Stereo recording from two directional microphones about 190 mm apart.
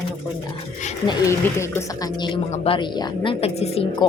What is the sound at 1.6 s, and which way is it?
Speech, 15° left (ahead or behind).